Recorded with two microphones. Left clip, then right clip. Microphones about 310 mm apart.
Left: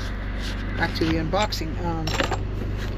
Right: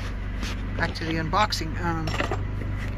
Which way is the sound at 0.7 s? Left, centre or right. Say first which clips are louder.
Left 4 dB; centre.